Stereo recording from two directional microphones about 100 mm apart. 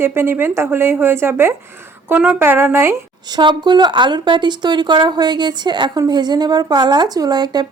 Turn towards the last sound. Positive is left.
turn(degrees=-45)  # may be behind; listen again after turning